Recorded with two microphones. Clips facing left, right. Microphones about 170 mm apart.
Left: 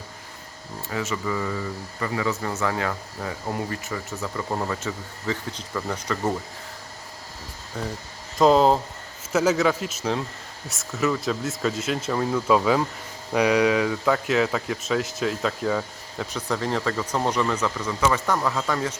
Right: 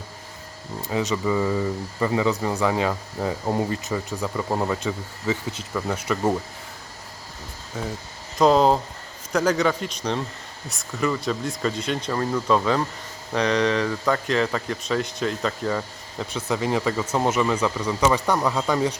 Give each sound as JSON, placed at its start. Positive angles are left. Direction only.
{"t": 0.8, "sound": "speech", "side_deg": -20}
{"t": 7.7, "sound": "speech", "side_deg": -5}